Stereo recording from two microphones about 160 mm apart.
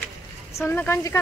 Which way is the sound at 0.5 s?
15° left (ahead or behind).